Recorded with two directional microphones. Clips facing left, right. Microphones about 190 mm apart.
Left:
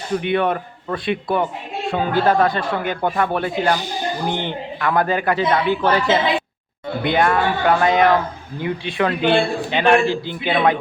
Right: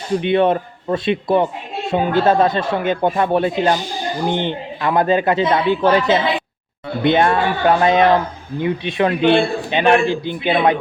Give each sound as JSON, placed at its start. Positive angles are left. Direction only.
{"t": 0.1, "sound": "a man's voice", "side_deg": -25}